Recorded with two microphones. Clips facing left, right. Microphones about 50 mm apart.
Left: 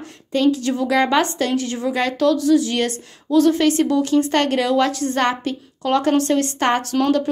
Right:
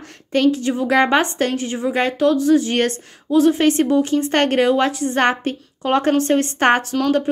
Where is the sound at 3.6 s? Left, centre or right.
Right.